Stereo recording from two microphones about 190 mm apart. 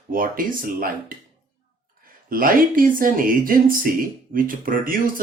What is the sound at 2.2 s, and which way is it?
Speech, 50° right (ahead or behind).